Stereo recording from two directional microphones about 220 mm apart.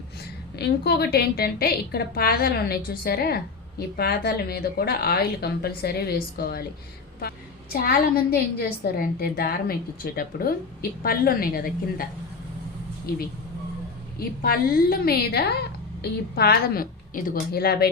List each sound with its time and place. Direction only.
0.5 s a woman's voice: 45° left (ahead or behind)
14.2 s a woman's voice: 40° left (ahead or behind)